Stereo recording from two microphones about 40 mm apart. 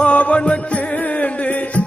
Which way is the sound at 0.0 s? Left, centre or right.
Left.